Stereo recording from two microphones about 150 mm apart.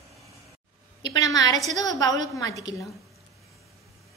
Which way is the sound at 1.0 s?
25° left (ahead or behind).